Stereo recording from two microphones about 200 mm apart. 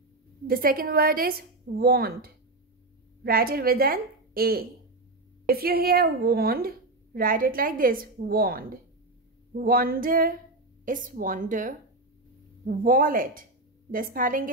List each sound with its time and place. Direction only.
0.5 s a woman's voice: 45° right (ahead or behind)